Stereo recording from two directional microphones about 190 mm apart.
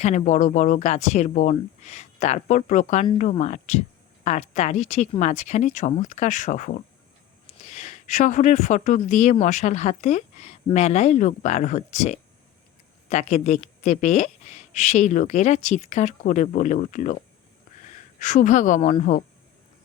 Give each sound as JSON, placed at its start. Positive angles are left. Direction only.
{"t": 0.0, "sound": "speech", "side_deg": 40}